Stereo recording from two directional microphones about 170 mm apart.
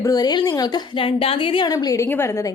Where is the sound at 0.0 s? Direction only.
20° left (ahead or behind).